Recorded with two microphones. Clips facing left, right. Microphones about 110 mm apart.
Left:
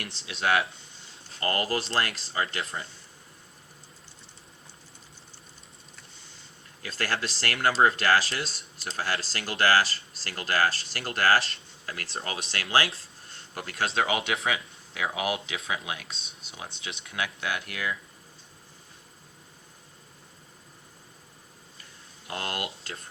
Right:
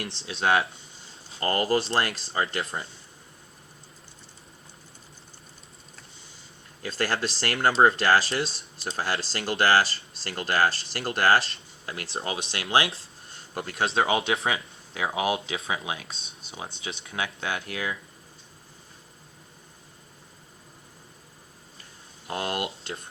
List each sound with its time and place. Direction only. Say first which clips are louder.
0.3 s speech: right 2 dB; 30° right (ahead or behind)
6.8 s speech: right 3 dB; 30° right (ahead or behind)
22.4 s speech: right 4 dB; 20° right (ahead or behind)